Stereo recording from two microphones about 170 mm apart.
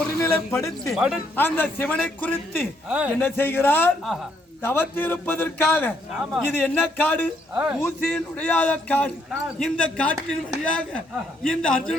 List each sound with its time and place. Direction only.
0.0 s a sound: 15° left (ahead or behind)
0.9 s a man's voice: 5° right (ahead or behind)
1.4 s a man's voice: 10° left (ahead or behind)
4.0 s a man's voice: centre (ahead or behind)
4.6 s a man's voice: 10° left (ahead or behind)
6.1 s a man's voice: 5° right (ahead or behind)
6.6 s a man's voice: 10° left (ahead or behind)
7.5 s speech: 10° right (ahead or behind)
7.8 s a man's voice: 10° left (ahead or behind)